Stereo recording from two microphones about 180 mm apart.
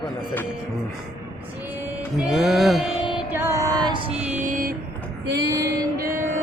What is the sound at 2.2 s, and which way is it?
Music, centre (ahead or behind).